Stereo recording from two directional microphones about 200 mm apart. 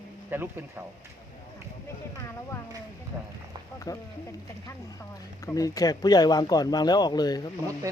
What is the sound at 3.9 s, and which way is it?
Speech, 15° left (ahead or behind).